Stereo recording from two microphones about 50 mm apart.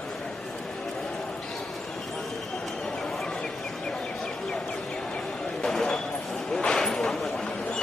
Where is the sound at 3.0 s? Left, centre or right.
Centre.